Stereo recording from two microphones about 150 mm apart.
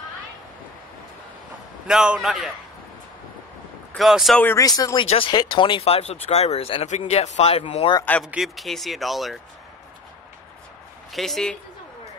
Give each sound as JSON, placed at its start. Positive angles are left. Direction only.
{"t": 1.9, "sound": "speech", "side_deg": -5}
{"t": 3.9, "sound": "speech", "side_deg": 0}
{"t": 4.4, "sound": "speech", "side_deg": 15}
{"t": 4.6, "sound": "speech", "side_deg": 25}
{"t": 5.1, "sound": "speech", "side_deg": 35}
{"t": 8.2, "sound": "speech", "side_deg": 0}
{"t": 11.1, "sound": "speech", "side_deg": 0}